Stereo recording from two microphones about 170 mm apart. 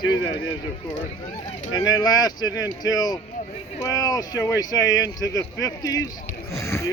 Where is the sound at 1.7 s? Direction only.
25° left (ahead or behind).